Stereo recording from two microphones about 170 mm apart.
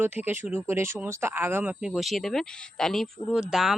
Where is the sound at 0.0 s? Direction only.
10° right (ahead or behind).